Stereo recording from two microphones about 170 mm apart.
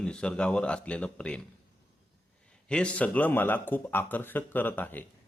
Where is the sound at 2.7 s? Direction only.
5° left (ahead or behind).